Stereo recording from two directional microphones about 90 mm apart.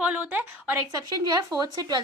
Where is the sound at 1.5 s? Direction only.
45° right (ahead or behind).